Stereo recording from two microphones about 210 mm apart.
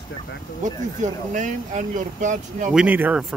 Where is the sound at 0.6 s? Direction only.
35° right (ahead or behind).